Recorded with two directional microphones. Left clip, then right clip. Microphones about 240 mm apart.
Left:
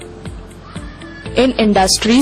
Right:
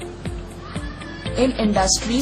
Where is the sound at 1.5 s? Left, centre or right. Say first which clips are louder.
Left 7 dB; left.